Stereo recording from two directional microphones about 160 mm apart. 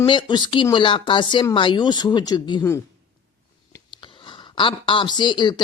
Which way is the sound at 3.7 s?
30° left (ahead or behind).